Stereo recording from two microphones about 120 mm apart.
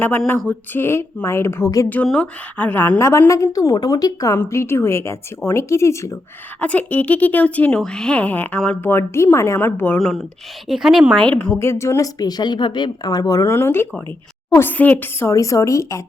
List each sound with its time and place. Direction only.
0.3 s a woman's voice: 15° left (ahead or behind)
2.0 s a woman's voice: 10° left (ahead or behind)
6.6 s a woman's voice: 15° left (ahead or behind)
10.0 s speech: 5° left (ahead or behind)
11.1 s a woman's voice: 10° left (ahead or behind)
11.5 s a woman's voice: 20° left (ahead or behind)
13.5 s a woman's voice: 20° left (ahead or behind)